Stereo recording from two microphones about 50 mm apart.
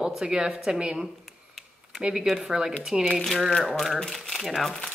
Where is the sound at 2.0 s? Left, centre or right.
Right.